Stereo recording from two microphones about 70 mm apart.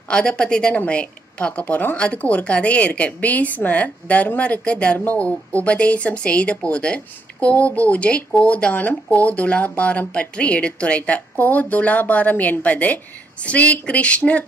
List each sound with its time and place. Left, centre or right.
0.1 s a woman's voice: centre